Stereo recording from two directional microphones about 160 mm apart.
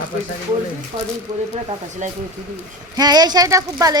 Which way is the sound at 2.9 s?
25° right (ahead or behind).